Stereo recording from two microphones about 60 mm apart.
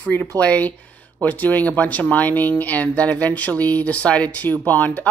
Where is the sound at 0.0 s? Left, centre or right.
Left.